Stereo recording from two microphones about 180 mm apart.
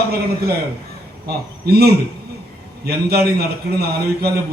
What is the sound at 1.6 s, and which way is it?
A man's voice, 60° right (ahead or behind).